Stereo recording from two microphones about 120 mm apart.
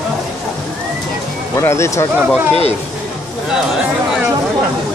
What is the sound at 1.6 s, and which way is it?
Speech, 25° left (ahead or behind).